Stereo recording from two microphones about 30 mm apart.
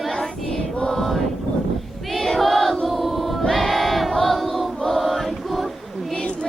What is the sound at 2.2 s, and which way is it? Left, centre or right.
Choir, centre.